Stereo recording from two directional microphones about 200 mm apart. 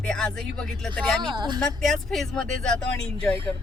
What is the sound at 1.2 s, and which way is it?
Speech, 25° right (ahead or behind).